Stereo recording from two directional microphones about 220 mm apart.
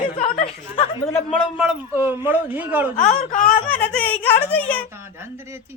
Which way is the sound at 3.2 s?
35° left (ahead or behind).